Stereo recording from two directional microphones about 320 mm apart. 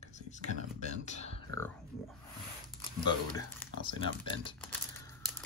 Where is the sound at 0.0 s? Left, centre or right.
Left.